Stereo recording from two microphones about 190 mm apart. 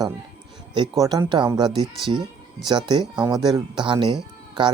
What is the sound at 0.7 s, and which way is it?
Speech, 20° right (ahead or behind).